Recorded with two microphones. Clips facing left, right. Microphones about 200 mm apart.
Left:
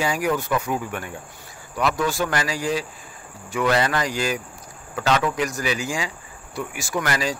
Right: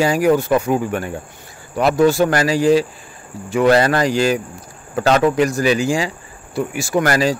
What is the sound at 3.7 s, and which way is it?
Speech, 40° right (ahead or behind).